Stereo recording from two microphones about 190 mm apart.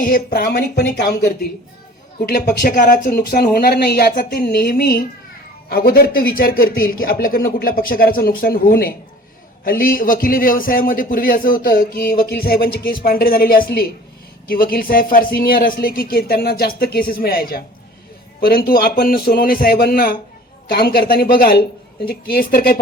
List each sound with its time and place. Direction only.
0.0 s speech: 50° left (ahead or behind)
2.2 s a man's voice: 50° left (ahead or behind)